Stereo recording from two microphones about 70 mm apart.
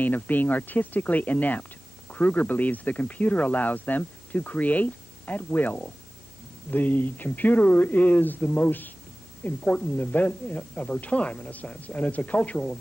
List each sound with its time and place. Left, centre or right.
0.0 s speech: left